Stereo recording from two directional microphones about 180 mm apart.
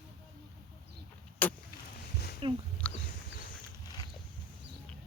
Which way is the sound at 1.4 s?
10° left (ahead or behind).